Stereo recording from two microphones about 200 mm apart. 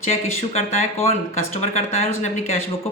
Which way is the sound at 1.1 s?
35° left (ahead or behind).